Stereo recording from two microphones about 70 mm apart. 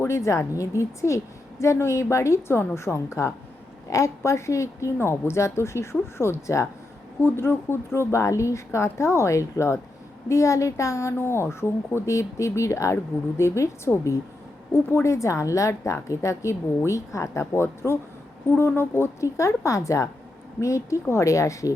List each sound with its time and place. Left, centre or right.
0.0 s a woman's voice: left
14.7 s a woman's voice: left
15.0 s a woman's voice: left